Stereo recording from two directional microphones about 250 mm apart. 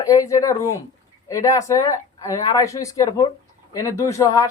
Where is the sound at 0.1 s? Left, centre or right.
Centre.